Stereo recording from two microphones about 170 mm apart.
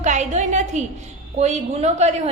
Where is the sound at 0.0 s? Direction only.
45° right (ahead or behind).